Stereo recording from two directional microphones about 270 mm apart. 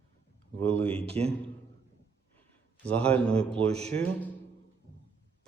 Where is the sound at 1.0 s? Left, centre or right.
Right.